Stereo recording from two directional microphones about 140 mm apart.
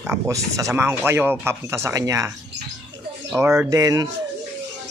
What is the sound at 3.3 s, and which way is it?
Speech, 15° right (ahead or behind).